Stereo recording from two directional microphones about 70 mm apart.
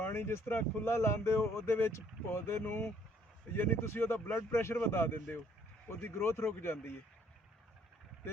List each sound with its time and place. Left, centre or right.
0.0 s speech: left